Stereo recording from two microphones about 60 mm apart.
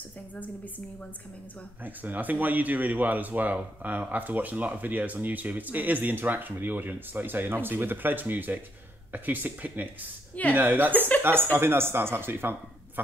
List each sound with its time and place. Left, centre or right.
2.0 s speech: right
10.9 s speech: left
11.5 s speech: right